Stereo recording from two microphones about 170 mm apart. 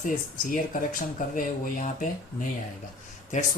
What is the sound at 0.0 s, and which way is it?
Speech, 50° left (ahead or behind).